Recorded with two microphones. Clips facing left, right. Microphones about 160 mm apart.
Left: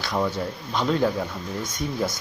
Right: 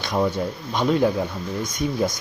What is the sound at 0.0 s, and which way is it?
Speech, 15° right (ahead or behind).